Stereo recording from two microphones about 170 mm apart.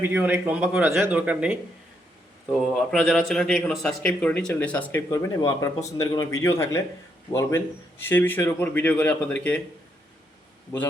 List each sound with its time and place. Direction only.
0.0 s a man's voice: 10° right (ahead or behind); by 9.6 s 10° left (ahead or behind)